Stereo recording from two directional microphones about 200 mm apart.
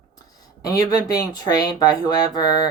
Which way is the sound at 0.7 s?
15° left (ahead or behind).